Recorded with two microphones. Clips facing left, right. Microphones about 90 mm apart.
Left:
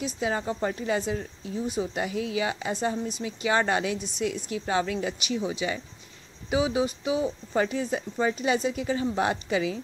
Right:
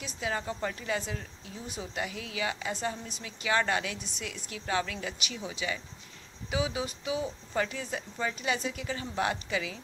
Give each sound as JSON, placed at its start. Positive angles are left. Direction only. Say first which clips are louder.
{"t": 0.0, "sound": "speech", "louder": "left 6 dB", "side_deg": 25}